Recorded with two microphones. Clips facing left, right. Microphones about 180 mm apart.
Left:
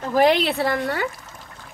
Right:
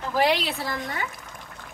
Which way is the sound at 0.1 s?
50° left (ahead or behind).